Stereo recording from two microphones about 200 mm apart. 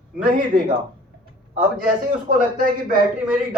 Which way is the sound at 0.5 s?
25° right (ahead or behind).